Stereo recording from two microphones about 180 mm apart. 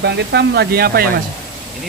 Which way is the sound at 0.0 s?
70° right (ahead or behind).